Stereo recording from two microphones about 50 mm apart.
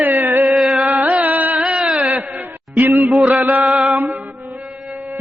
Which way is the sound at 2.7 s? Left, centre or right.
Right.